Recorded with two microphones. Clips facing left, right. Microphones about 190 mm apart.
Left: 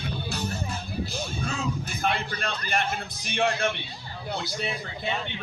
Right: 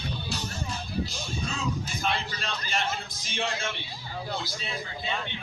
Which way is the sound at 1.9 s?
60° left (ahead or behind).